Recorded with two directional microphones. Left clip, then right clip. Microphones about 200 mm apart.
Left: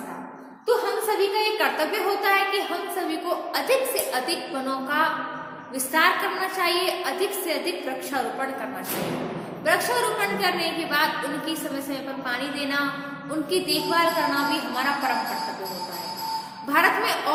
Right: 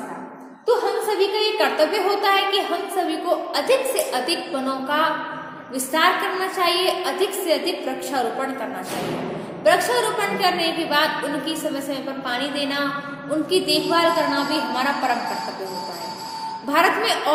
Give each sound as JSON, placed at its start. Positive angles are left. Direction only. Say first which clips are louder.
{"t": 0.7, "sound": "a sound", "louder": "right 3 dB", "side_deg": 0}
{"t": 1.0, "sound": "a woman's voice", "louder": "right 2 dB", "side_deg": -10}
{"t": 9.6, "sound": "a woman's voice", "louder": "right 4 dB", "side_deg": -10}
{"t": 16.6, "sound": "a woman's voice", "louder": "right 2 dB", "side_deg": -15}